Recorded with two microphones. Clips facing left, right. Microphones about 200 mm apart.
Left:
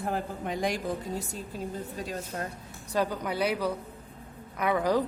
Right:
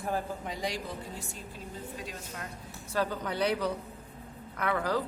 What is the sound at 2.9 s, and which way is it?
A woman's voice, 15° left (ahead or behind).